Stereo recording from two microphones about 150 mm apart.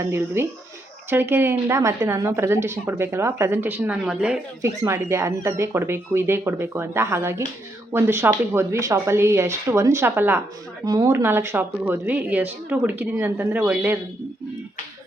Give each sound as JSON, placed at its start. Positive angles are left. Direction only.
{"t": 0.0, "sound": "a woman's voice", "side_deg": -15}
{"t": 4.6, "sound": "a woman's voice", "side_deg": -20}